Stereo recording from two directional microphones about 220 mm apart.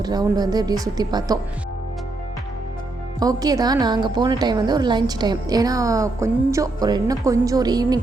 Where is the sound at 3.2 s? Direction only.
15° right (ahead or behind).